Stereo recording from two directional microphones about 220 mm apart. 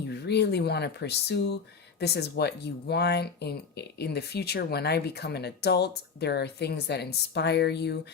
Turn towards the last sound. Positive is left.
turn(degrees=50)  # may be behind; listen again after turning